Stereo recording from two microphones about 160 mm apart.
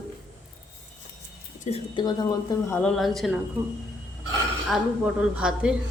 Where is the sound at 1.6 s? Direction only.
35° left (ahead or behind).